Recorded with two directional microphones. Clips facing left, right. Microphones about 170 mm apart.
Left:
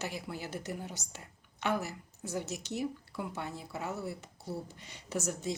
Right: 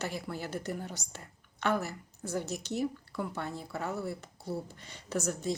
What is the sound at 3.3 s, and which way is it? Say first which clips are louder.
Speech: right 2 dB; 20° left (ahead or behind).